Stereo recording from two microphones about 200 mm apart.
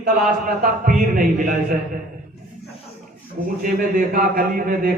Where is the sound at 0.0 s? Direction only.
45° right (ahead or behind).